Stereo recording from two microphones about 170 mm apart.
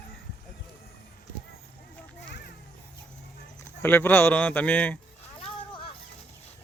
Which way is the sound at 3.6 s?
10° left (ahead or behind).